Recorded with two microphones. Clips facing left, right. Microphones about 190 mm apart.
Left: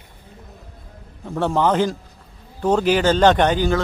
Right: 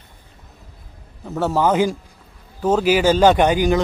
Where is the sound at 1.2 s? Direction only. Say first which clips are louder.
Right 1 dB; 5° right (ahead or behind).